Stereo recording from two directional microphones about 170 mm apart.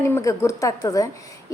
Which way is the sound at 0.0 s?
15° left (ahead or behind).